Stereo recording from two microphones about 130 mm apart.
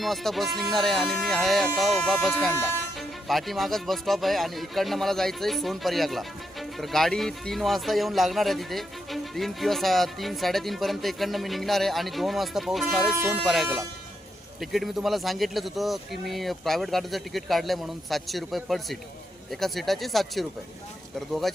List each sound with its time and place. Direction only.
0.0 s speech: centre (ahead or behind)